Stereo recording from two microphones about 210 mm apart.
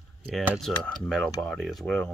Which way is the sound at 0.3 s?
Centre (ahead or behind).